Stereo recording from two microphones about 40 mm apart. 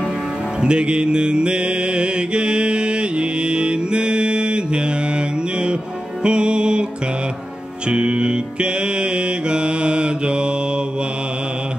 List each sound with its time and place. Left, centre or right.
0.6 s mantra: right
6.2 s music: right
7.9 s music: right